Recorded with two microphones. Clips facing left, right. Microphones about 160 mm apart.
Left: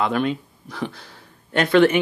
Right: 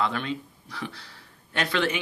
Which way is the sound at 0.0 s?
50° left (ahead or behind).